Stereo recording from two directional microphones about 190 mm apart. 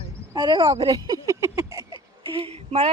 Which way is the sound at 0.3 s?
20° right (ahead or behind).